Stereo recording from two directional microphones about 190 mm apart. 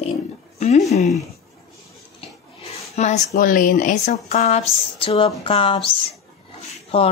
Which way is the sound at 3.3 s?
45° left (ahead or behind).